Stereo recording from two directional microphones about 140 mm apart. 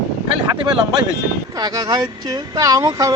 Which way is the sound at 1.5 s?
30° right (ahead or behind).